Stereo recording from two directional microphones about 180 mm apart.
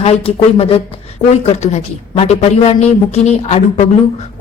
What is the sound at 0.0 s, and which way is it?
Speech, 35° left (ahead or behind).